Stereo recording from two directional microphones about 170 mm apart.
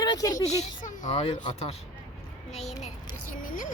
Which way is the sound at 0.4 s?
40° left (ahead or behind).